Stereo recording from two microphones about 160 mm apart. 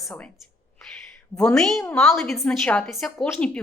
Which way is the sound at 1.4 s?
5° left (ahead or behind).